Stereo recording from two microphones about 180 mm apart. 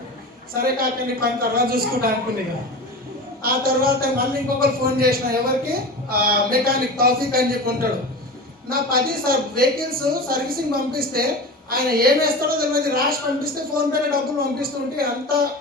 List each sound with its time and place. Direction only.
0.5 s a man's voice: 55° right (ahead or behind)
3.4 s a man's voice: 55° right (ahead or behind)